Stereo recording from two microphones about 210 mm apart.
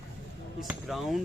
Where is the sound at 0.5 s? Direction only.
Centre (ahead or behind).